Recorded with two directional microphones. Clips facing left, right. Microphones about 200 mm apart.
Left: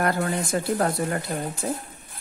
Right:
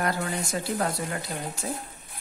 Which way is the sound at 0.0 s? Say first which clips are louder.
Left 4 dB; 55° left (ahead or behind).